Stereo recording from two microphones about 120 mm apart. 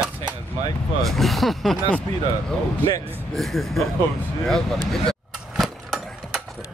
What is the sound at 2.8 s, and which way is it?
Speech, 15° right (ahead or behind).